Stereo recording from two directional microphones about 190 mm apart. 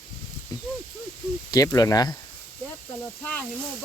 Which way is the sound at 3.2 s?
5° left (ahead or behind).